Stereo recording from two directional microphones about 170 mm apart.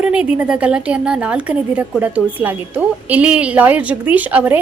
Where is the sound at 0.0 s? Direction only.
5° right (ahead or behind).